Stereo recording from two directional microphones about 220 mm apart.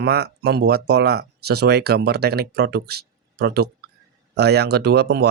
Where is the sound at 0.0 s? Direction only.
45° right (ahead or behind).